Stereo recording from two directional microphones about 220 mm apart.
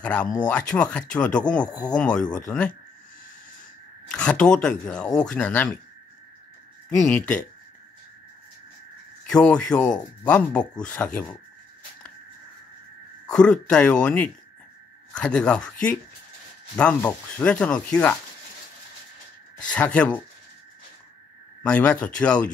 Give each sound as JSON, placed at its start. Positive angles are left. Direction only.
{"t": 0.0, "sound": "speech", "side_deg": 5}
{"t": 1.7, "sound": "speech", "side_deg": 20}
{"t": 2.0, "sound": "speech", "side_deg": 5}
{"t": 4.1, "sound": "speech", "side_deg": 5}
{"t": 7.1, "sound": "speech", "side_deg": 5}
{"t": 9.3, "sound": "speech", "side_deg": 5}
{"t": 13.3, "sound": "speech", "side_deg": 5}
{"t": 19.7, "sound": "speech", "side_deg": 5}
{"t": 21.6, "sound": "speech", "side_deg": 5}